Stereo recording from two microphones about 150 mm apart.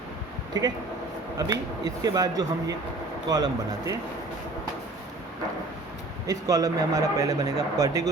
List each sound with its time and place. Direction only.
1.4 s speech: 25° right (ahead or behind)
6.2 s speech: 25° right (ahead or behind)